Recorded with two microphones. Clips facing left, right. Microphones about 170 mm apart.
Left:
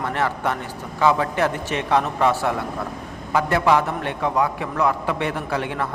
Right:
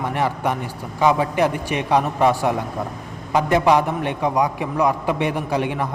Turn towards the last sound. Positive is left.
turn(degrees=-15)  # may be behind; listen again after turning